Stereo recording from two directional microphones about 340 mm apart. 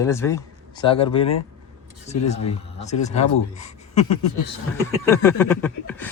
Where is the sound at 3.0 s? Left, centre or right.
Centre.